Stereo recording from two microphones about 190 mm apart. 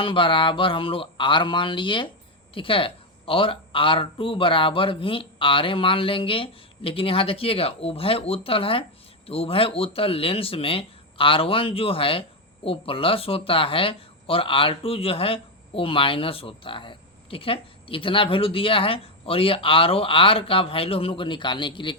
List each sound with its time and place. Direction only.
0.0 s speech: 25° left (ahead or behind)